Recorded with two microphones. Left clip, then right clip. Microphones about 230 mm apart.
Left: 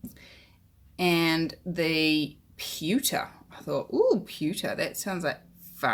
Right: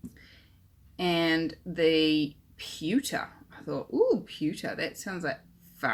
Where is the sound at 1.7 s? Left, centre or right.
Left.